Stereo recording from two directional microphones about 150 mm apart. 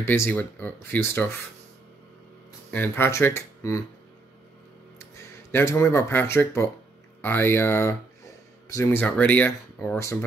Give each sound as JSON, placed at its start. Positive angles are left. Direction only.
{"t": 0.0, "sound": "speech", "side_deg": 15}
{"t": 2.7, "sound": "speech", "side_deg": 15}
{"t": 5.5, "sound": "speech", "side_deg": 15}